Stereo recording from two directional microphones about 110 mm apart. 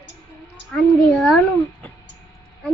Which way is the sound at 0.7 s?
5° left (ahead or behind).